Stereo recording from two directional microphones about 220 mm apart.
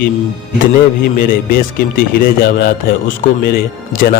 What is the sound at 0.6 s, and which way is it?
Speech, 40° left (ahead or behind).